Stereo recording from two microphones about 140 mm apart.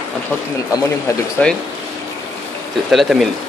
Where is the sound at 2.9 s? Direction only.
Centre (ahead or behind).